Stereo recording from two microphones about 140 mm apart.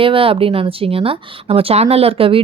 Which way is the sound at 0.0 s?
40° right (ahead or behind).